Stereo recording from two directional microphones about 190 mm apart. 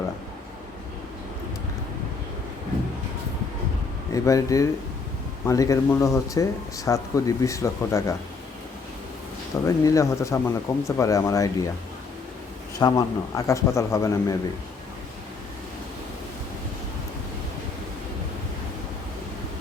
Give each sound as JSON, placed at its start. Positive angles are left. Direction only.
{"t": 4.1, "sound": "speech", "side_deg": 15}
{"t": 9.6, "sound": "speech", "side_deg": 15}
{"t": 12.8, "sound": "speech", "side_deg": 15}